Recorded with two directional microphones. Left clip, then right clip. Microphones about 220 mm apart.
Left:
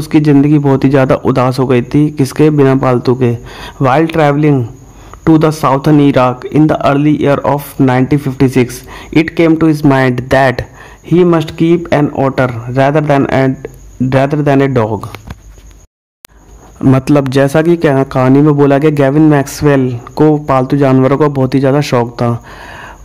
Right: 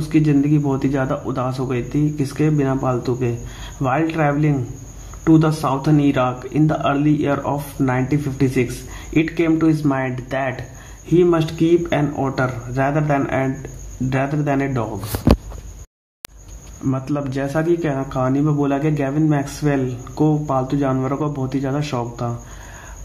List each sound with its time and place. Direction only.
0.1 s speech: 50° left (ahead or behind)
16.9 s speech: 50° left (ahead or behind)